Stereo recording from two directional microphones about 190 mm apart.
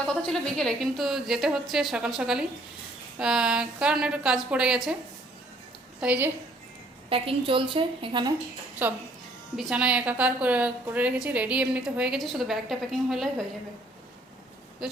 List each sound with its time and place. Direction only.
0.3 s a woman's voice: centre (ahead or behind)
6.0 s a woman's voice: 10° right (ahead or behind)
7.1 s a woman's voice: 30° right (ahead or behind)
8.8 s a woman's voice: 10° right (ahead or behind)